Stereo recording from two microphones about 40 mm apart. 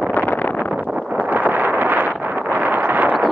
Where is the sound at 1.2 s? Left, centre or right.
Right.